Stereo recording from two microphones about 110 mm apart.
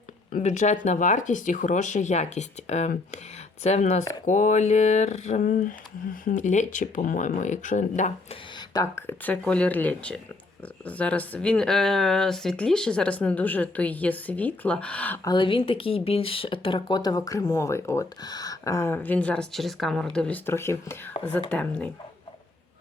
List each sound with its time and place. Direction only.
0.4 s speech: 90° left
6.4 s speech: 90° left
8.7 s speech: 25° left (ahead or behind)
15.2 s speech: 40° left (ahead or behind); by 18.1 s 25° left (ahead or behind)
18.2 s a woman's voice: 35° left (ahead or behind)
21.5 s speech: 10° left (ahead or behind)